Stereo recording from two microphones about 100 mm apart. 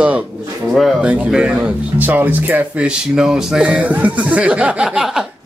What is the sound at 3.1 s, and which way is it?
Speech, 5° right (ahead or behind).